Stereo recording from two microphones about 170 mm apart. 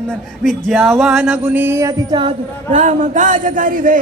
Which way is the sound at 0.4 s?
Centre (ahead or behind).